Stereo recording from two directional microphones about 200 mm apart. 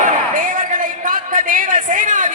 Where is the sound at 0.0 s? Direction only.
40° right (ahead or behind).